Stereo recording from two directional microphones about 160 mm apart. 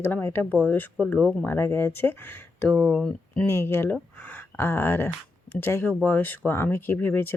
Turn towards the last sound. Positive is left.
turn(degrees=15)  # may be behind; listen again after turning